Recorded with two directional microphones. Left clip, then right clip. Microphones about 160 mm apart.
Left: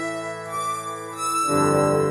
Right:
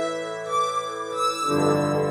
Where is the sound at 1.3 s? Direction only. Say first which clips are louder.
Left 5 dB; 45° left (ahead or behind).